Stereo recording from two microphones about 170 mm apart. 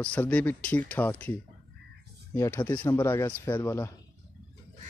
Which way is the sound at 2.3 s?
15° left (ahead or behind).